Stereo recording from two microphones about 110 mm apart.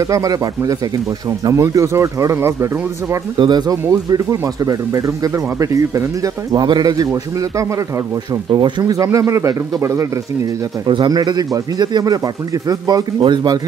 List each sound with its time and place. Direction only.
0.0 s speech: 30° right (ahead or behind)
3.3 s speech: 40° right (ahead or behind)
8.5 s speech: 45° right (ahead or behind); by 10.0 s 25° right (ahead or behind)
10.9 s speech: 45° right (ahead or behind)